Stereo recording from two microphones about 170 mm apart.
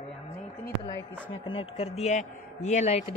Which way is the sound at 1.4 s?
30° left (ahead or behind).